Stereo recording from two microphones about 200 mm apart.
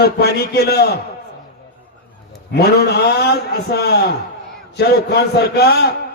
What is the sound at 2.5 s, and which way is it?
A man's voice, 55° left (ahead or behind).